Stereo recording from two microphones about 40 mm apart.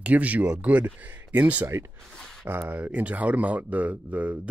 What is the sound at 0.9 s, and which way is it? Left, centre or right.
Speech, right.